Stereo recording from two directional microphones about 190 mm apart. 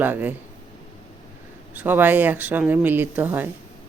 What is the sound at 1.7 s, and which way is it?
Speech, 10° right (ahead or behind).